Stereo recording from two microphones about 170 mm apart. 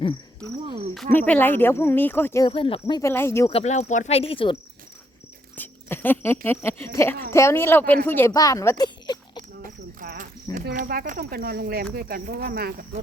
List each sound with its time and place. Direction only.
1.1 s speech: 10° left (ahead or behind)
2.4 s speech: 30° left (ahead or behind)
3.0 s speech: 15° left (ahead or behind)
3.5 s speech: 40° left (ahead or behind)
5.5 s speech: 10° left (ahead or behind)
9.6 s cricket: 50° right (ahead or behind)
10.8 s speech: 55° right (ahead or behind)